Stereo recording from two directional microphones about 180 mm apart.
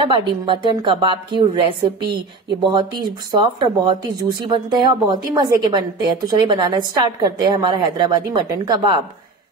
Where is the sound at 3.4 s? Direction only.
25° right (ahead or behind).